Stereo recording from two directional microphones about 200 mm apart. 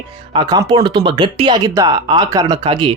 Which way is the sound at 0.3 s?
20° right (ahead or behind).